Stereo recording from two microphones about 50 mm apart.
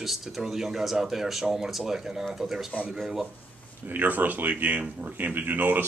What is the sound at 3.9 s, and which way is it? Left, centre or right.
Speech, right.